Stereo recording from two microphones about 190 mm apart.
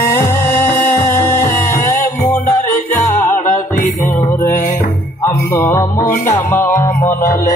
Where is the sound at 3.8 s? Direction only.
40° left (ahead or behind).